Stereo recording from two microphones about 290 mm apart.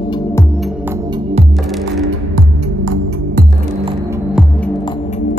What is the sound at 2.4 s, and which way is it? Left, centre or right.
Music, right.